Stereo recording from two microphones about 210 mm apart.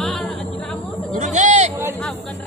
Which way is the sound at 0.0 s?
Centre (ahead or behind).